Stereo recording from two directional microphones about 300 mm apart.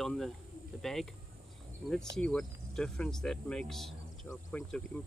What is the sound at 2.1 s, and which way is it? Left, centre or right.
Speech, centre.